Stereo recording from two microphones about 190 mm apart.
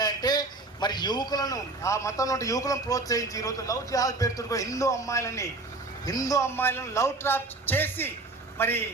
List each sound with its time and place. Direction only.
0.0 s a man's voice: 20° left (ahead or behind)